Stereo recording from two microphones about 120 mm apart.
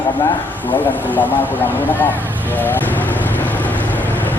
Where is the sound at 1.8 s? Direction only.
15° left (ahead or behind).